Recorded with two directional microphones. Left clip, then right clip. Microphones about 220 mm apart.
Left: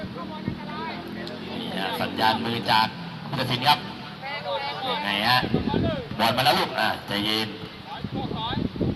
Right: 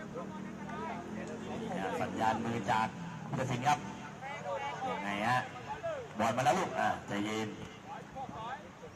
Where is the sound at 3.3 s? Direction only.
40° left (ahead or behind).